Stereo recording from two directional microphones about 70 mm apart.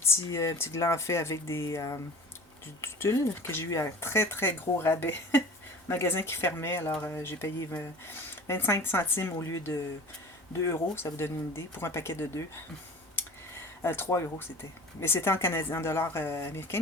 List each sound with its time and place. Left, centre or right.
0.0 s speech: left
9.4 s speech: left
13.8 s speech: left